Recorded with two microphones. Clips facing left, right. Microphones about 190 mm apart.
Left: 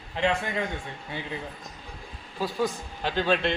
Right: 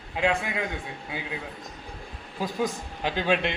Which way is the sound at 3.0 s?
10° right (ahead or behind).